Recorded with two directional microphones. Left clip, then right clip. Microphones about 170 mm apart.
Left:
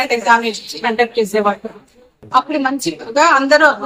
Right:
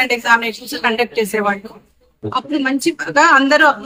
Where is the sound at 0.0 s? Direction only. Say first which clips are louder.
Left 1 dB; 25° right (ahead or behind).